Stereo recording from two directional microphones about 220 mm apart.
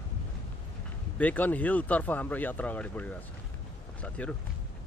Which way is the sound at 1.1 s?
5° left (ahead or behind).